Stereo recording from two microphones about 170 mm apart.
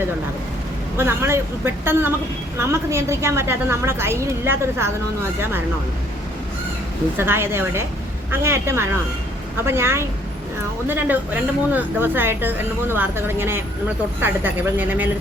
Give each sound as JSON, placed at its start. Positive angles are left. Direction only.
{"t": 0.9, "sound": "a woman's voice", "side_deg": -15}
{"t": 7.2, "sound": "a woman's voice", "side_deg": -15}